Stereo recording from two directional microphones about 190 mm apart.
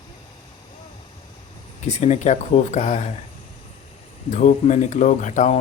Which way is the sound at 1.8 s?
40° left (ahead or behind).